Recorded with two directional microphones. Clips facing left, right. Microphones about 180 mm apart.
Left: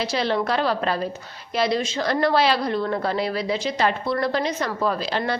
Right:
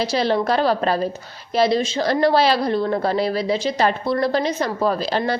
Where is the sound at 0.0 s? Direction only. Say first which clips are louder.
Right 3 dB; 35° right (ahead or behind).